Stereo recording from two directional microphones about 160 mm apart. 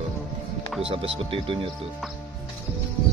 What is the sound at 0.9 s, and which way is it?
Speech, 35° right (ahead or behind).